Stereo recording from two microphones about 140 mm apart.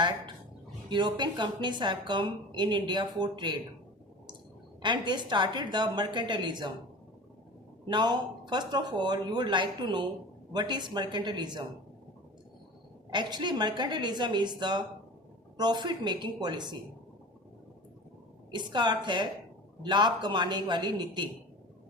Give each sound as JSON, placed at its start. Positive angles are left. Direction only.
{"t": 0.9, "sound": "a woman's voice", "side_deg": -35}
{"t": 4.8, "sound": "a woman's voice", "side_deg": -35}
{"t": 7.9, "sound": "a woman's voice", "side_deg": -30}
{"t": 13.1, "sound": "a woman's voice", "side_deg": -30}
{"t": 18.5, "sound": "a woman's voice", "side_deg": -30}